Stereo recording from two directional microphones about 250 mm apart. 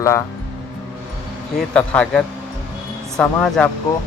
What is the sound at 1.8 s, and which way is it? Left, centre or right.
Speech, centre.